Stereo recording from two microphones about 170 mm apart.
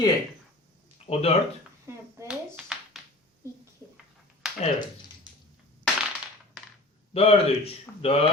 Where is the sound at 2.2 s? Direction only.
5° right (ahead or behind).